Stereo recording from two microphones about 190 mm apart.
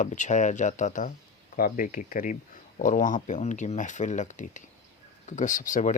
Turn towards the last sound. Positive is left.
turn(degrees=40)  # may be behind; listen again after turning